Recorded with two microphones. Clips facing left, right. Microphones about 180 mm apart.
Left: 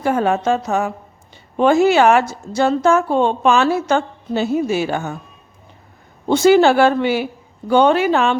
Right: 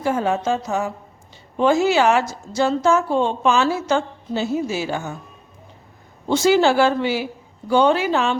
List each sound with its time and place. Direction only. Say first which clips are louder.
0.0 s a woman's voice: left 3 dB; 60° left (ahead or behind)
6.2 s a woman's voice: left 4 dB; 60° left (ahead or behind)